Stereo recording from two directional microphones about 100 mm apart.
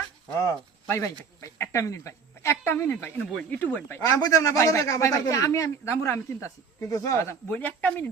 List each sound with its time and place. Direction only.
0.3 s speech: 30° left (ahead or behind)
3.2 s speech: 5° left (ahead or behind)
3.6 s speech: 15° left (ahead or behind)
4.2 s speech: 35° left (ahead or behind)
7.5 s speech: 15° left (ahead or behind)